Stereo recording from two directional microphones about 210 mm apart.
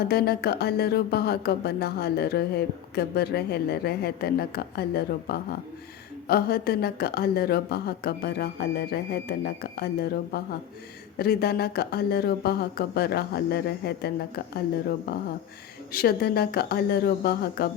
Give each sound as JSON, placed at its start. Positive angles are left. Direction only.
{"t": 0.1, "sound": "speech", "side_deg": 50}